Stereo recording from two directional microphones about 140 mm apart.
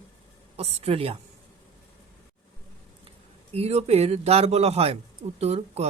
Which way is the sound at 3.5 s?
50° right (ahead or behind).